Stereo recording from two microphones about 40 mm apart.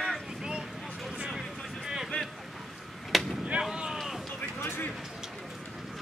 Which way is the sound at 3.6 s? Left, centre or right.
Centre.